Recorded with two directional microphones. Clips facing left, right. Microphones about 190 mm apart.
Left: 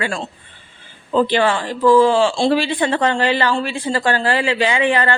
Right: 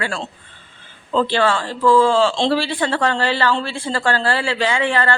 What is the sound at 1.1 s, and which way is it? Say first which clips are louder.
Speech: left 2 dB; 15° left (ahead or behind).